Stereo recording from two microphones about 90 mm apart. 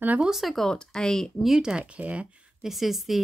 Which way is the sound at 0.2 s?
5° right (ahead or behind).